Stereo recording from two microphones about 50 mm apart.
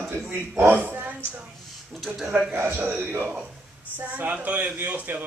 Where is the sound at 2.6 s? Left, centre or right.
Right.